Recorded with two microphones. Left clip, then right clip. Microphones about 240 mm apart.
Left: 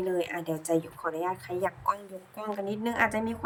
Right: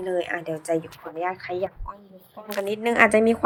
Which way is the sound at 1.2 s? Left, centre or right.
Centre.